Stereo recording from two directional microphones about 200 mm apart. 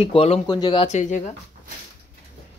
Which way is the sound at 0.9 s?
35° left (ahead or behind).